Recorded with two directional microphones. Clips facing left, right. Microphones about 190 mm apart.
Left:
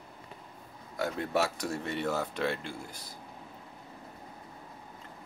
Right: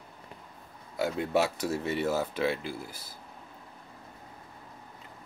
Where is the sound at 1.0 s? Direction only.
10° right (ahead or behind).